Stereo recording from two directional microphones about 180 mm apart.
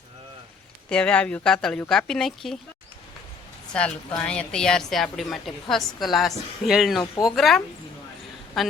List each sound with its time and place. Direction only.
0.9 s a woman's voice: 5° left (ahead or behind)
3.7 s a woman's voice: 5° left (ahead or behind)
7.0 s speech: 20° left (ahead or behind)
7.3 s a woman's voice: centre (ahead or behind)